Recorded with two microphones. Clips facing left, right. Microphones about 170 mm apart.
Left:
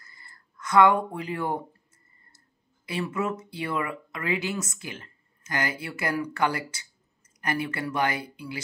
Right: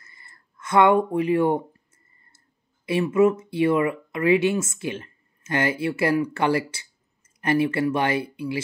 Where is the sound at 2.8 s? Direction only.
20° right (ahead or behind).